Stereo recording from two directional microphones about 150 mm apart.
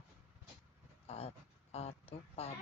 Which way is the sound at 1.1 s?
40° left (ahead or behind).